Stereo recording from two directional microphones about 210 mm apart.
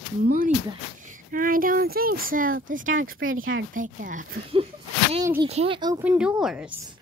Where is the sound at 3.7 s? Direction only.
40° right (ahead or behind).